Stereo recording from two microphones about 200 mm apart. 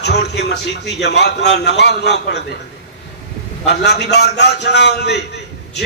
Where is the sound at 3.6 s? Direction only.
55° left (ahead or behind).